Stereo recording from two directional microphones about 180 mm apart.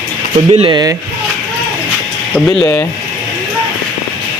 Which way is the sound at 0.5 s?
30° right (ahead or behind).